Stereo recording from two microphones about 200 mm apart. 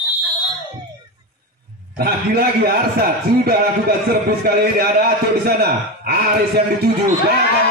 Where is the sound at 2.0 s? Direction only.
50° right (ahead or behind).